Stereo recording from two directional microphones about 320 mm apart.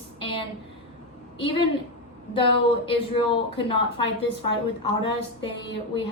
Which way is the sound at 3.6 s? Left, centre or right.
Centre.